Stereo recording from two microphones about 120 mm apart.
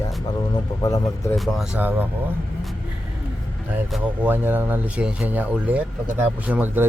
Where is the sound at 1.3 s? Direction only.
Centre (ahead or behind).